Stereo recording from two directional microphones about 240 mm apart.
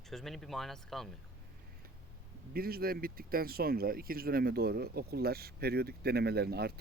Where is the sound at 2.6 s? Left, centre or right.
Right.